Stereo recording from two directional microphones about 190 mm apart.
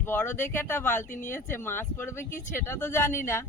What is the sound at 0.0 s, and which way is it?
A man's voice, 10° left (ahead or behind).